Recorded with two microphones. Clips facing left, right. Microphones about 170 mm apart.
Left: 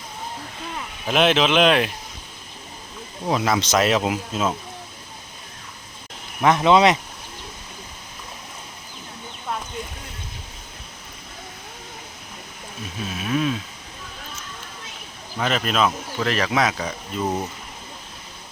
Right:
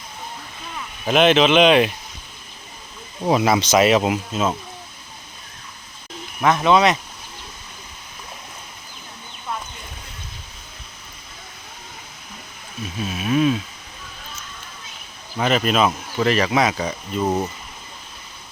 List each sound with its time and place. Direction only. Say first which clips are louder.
1.0 s speech: right 3 dB; centre (ahead or behind)
3.2 s speech: right 4 dB; 10° right (ahead or behind)
6.4 s speech: left 1 dB; 20° left (ahead or behind)
13.1 s speech: right 5 dB; 5° right (ahead or behind)
15.4 s speech: right 3 dB; 5° right (ahead or behind)